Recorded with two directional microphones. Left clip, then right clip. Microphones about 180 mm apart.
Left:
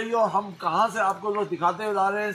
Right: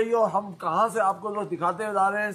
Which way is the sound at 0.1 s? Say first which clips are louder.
Even; 20° right (ahead or behind).